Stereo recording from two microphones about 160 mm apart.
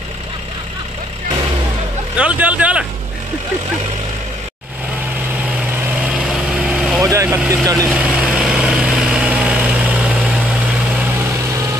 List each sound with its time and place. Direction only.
2.1 s speech: 10° right (ahead or behind)
6.0 s vehicle: 5° right (ahead or behind)
7.0 s speech: 15° right (ahead or behind)
7.9 s vehicle: 5° right (ahead or behind)